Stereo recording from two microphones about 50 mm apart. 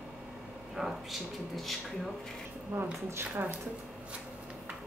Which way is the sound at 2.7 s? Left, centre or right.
Right.